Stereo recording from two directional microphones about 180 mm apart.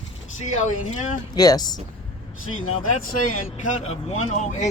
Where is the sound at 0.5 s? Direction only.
40° left (ahead or behind).